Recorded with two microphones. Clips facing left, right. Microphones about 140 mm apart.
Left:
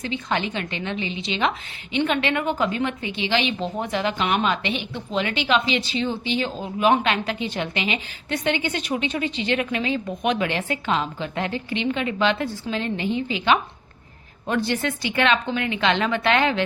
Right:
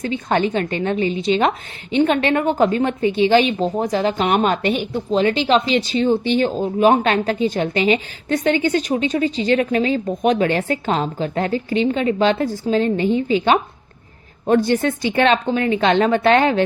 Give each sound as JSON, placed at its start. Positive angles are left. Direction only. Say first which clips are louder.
{"t": 0.0, "sound": "a woman's voice", "louder": "right 7 dB", "side_deg": -45}